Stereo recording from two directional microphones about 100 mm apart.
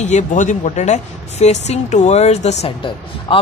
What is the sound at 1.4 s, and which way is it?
Speech, 90° left.